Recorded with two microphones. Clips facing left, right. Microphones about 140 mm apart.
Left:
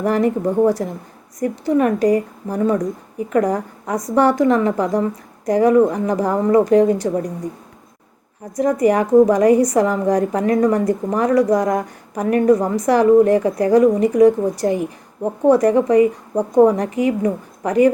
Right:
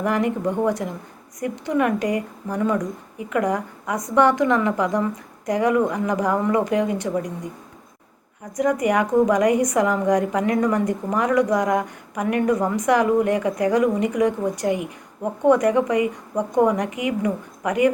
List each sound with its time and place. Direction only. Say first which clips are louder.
0.0 s a woman's voice: left 4 dB; 35° left (ahead or behind)
8.5 s a woman's voice: left 4 dB; 30° left (ahead or behind)